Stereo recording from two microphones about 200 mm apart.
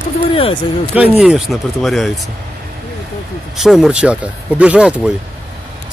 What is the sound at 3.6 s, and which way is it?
Speech, centre (ahead or behind).